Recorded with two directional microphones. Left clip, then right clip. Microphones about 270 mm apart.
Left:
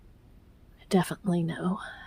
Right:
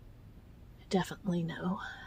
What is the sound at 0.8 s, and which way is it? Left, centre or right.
Speech, left.